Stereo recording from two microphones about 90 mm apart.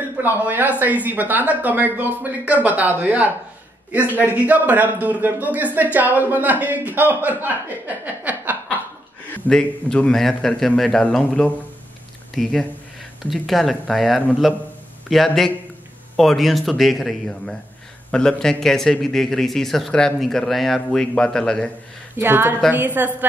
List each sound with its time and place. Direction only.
0.2 s a man's voice: 20° right (ahead or behind)
9.5 s a man's voice: 5° left (ahead or behind)
22.1 s a man's voice: 25° right (ahead or behind)